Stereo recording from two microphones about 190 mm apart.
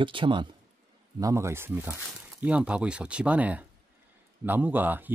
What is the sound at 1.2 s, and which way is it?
Speech, 15° right (ahead or behind).